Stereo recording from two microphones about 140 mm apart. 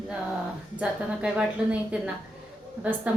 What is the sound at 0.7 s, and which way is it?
A woman's voice, 10° right (ahead or behind).